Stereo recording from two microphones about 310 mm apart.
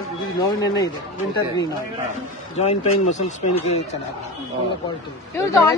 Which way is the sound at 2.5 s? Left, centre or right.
Left.